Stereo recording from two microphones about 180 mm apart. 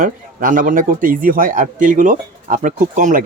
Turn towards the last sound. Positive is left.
turn(degrees=-45)  # may be behind; listen again after turning